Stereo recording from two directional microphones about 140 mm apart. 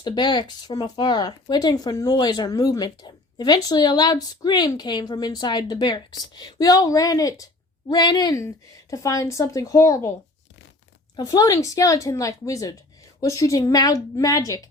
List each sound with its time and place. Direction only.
0.0 s speech: 30° left (ahead or behind)
11.2 s speech: 30° left (ahead or behind)